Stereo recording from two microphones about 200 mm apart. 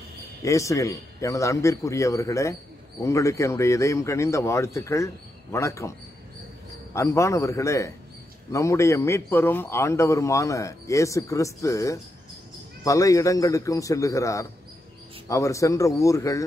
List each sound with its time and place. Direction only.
0.4 s a man's voice: 15° left (ahead or behind)